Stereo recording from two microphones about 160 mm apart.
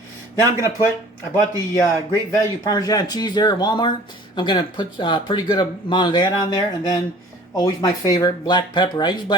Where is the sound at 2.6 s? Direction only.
25° left (ahead or behind).